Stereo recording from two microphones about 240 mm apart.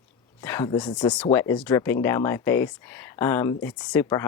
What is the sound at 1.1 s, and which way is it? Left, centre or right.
Speech, centre.